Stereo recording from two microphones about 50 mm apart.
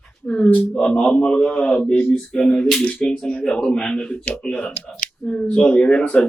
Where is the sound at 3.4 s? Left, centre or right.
Centre.